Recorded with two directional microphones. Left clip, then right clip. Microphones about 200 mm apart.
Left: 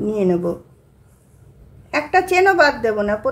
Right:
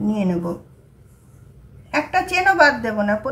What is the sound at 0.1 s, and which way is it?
Speech, 35° left (ahead or behind).